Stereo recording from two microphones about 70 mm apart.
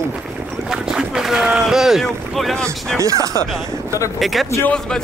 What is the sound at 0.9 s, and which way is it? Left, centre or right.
Speech, centre.